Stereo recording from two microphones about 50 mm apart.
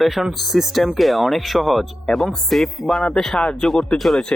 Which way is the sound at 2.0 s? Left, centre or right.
Centre.